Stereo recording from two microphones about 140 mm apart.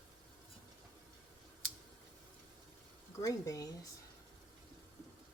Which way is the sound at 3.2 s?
25° left (ahead or behind).